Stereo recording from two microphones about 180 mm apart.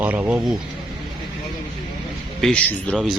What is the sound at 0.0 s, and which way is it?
Speech, 10° right (ahead or behind).